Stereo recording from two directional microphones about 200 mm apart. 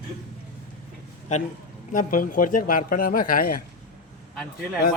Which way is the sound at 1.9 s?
40° left (ahead or behind).